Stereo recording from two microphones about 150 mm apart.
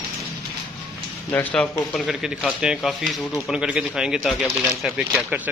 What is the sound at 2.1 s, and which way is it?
Speech, 5° right (ahead or behind).